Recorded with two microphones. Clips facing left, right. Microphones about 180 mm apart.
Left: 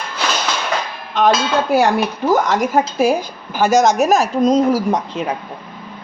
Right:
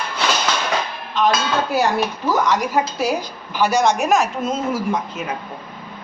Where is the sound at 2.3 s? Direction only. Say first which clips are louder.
Left 4 dB; 50° left (ahead or behind).